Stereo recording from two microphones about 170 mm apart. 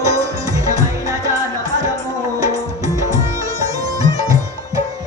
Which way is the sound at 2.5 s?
20° right (ahead or behind).